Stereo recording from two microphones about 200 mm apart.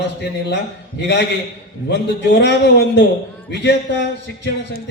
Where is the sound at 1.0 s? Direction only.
60° left (ahead or behind).